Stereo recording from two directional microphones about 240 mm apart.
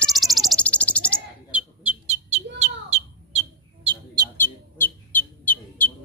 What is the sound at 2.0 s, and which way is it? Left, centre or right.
Bird, right.